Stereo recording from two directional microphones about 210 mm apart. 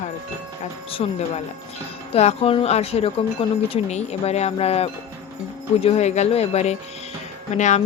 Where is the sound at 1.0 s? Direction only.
25° left (ahead or behind).